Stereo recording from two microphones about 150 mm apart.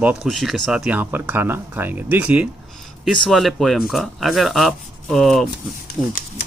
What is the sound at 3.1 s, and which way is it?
Speech, centre (ahead or behind).